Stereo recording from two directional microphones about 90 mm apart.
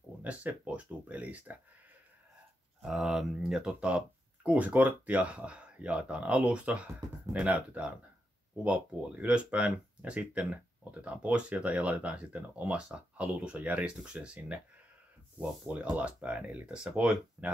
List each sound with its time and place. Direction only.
0.2 s speech: 15° right (ahead or behind)
2.8 s speech: 5° right (ahead or behind)